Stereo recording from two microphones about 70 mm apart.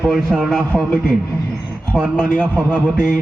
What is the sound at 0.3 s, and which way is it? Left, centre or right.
Speech, centre.